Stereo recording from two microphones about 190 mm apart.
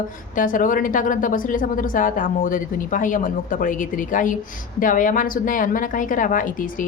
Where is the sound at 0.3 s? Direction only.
45° left (ahead or behind).